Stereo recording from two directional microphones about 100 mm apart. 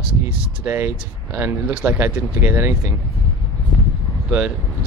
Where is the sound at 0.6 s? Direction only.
20° right (ahead or behind).